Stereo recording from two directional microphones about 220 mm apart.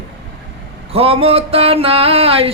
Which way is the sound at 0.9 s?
25° right (ahead or behind).